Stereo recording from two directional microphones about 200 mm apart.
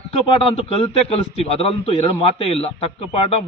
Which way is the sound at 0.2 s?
30° left (ahead or behind).